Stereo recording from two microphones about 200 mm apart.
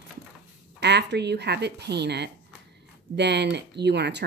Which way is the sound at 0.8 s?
60° right (ahead or behind).